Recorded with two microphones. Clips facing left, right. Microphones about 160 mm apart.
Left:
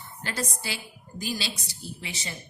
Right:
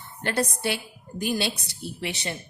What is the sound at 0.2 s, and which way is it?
Speech, 60° right (ahead or behind).